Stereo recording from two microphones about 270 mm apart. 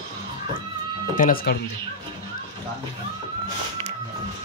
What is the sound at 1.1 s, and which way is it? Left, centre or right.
Speech, left.